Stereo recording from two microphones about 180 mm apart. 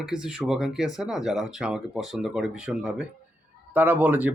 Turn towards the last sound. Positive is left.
turn(degrees=-10)  # may be behind; listen again after turning